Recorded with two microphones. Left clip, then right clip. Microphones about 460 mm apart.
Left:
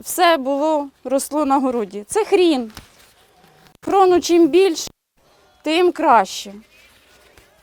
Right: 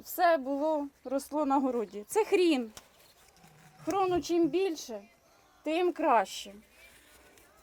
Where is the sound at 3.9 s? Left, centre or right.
Left.